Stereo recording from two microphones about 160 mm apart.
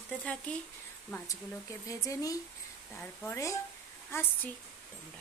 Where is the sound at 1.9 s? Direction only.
20° left (ahead or behind).